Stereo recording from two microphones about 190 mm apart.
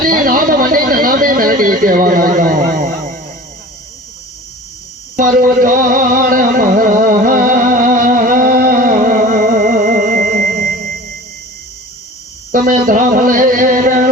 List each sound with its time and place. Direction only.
0.1 s speech: 45° right (ahead or behind)
5.1 s a sound: 45° right (ahead or behind)
12.5 s music: 45° right (ahead or behind)